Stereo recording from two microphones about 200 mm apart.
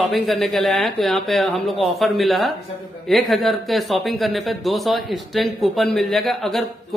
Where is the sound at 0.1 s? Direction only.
Centre (ahead or behind).